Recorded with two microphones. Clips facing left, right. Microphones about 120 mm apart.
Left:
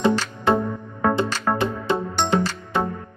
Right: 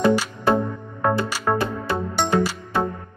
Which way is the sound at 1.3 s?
5° right (ahead or behind).